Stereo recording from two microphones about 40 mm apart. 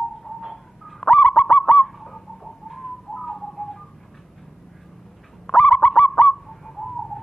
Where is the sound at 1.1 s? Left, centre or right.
Left.